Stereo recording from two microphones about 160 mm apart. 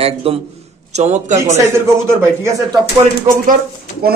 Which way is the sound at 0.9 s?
45° right (ahead or behind).